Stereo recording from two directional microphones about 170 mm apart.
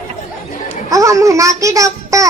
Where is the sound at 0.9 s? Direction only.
20° right (ahead or behind).